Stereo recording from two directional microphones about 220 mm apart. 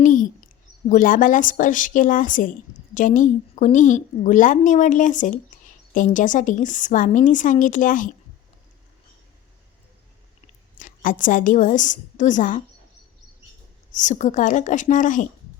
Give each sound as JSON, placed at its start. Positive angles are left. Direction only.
{"t": 0.0, "sound": "a sound", "side_deg": 35}
{"t": 0.9, "sound": "speech", "side_deg": 40}
{"t": 10.8, "sound": "a woman's voice", "side_deg": 35}
{"t": 14.0, "sound": "speech", "side_deg": 35}